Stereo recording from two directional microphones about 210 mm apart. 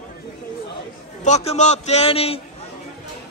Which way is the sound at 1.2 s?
30° left (ahead or behind).